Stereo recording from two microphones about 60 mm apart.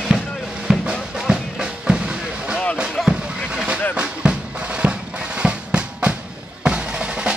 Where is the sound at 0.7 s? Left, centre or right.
Centre.